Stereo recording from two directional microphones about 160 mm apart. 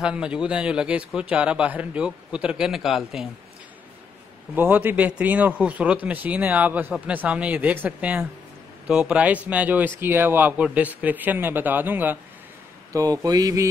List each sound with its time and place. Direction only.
0.0 s a man's voice: 5° right (ahead or behind)
4.6 s a man's voice: 10° right (ahead or behind)
12.9 s speech: 20° right (ahead or behind)